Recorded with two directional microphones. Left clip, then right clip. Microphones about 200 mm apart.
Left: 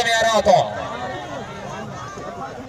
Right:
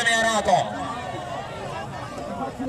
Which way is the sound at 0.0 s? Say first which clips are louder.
Left 4 dB; 25° left (ahead or behind).